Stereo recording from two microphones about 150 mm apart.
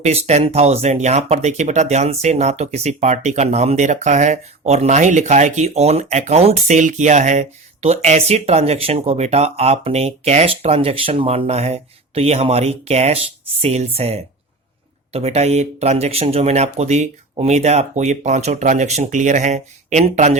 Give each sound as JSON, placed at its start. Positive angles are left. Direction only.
{"t": 0.0, "sound": "speech", "side_deg": -45}